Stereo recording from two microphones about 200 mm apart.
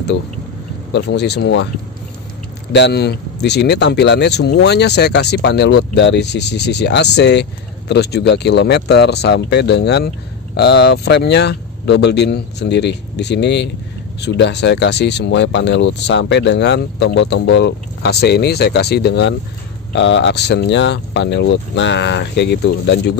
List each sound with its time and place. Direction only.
0.9 s speech: 60° left (ahead or behind)
2.7 s speech: 60° left (ahead or behind)